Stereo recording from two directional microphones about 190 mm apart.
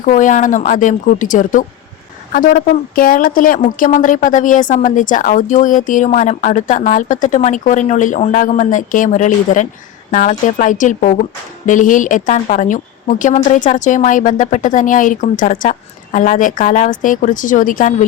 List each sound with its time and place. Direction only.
0.0 s a woman's voice: 45° left (ahead or behind)